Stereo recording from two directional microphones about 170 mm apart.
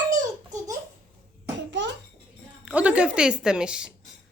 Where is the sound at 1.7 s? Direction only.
90° right.